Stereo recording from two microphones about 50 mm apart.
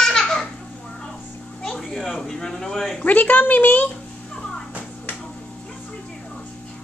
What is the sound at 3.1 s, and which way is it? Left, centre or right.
Speech, left.